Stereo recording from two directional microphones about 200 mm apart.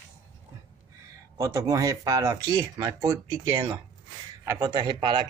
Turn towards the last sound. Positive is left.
turn(degrees=-25)  # may be behind; listen again after turning